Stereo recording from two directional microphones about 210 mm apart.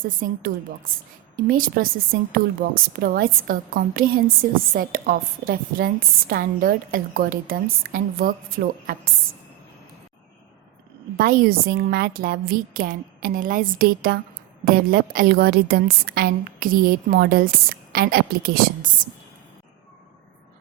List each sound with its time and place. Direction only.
0.0 s a woman's voice: 40° right (ahead or behind)
11.2 s a woman's voice: 45° right (ahead or behind)